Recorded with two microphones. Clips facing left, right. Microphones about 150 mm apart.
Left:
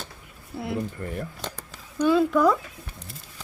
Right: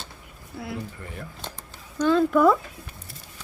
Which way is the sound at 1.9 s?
10° left (ahead or behind).